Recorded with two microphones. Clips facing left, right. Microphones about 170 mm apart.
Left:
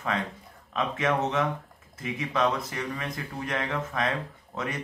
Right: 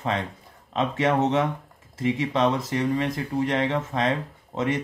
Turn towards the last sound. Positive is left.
turn(degrees=-25)  # may be behind; listen again after turning